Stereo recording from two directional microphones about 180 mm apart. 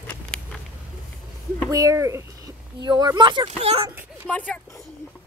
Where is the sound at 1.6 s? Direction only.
20° right (ahead or behind).